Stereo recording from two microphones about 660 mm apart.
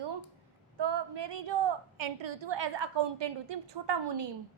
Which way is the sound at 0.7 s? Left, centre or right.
Right.